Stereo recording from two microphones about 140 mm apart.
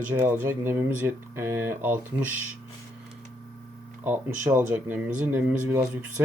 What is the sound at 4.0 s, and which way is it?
Speech, 15° right (ahead or behind).